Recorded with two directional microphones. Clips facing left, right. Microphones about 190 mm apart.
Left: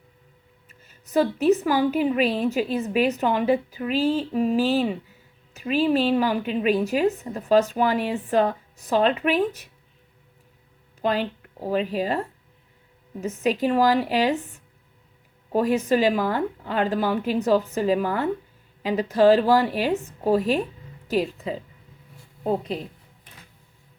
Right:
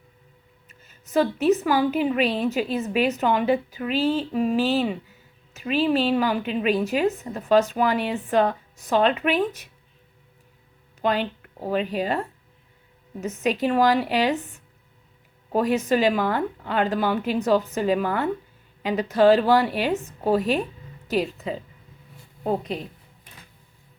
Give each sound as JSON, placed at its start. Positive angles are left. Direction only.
{"t": 1.1, "sound": "a woman's voice", "side_deg": 35}
{"t": 11.0, "sound": "a woman's voice", "side_deg": 35}
{"t": 15.5, "sound": "a woman's voice", "side_deg": 35}